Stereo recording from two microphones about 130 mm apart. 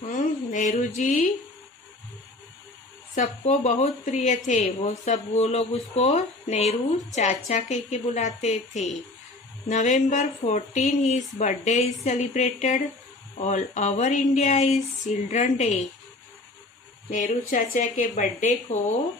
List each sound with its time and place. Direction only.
0.1 s a sound: 80° left
3.2 s a woman's voice: 65° left (ahead or behind)
17.1 s a woman's voice: 85° left; by 18.9 s 65° left (ahead or behind)